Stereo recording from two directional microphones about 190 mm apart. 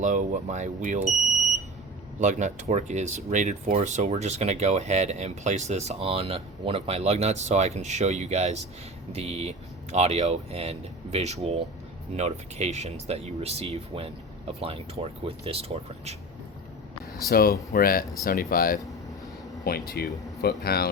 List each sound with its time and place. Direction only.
0.0 s speech: 40° right (ahead or behind)
2.2 s speech: 40° right (ahead or behind)
17.2 s speech: 50° left (ahead or behind)